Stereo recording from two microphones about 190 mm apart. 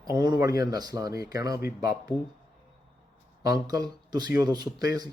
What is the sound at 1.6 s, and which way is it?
Speech, 55° left (ahead or behind).